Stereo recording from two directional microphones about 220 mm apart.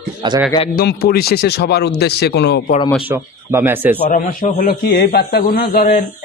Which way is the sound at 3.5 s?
10° right (ahead or behind).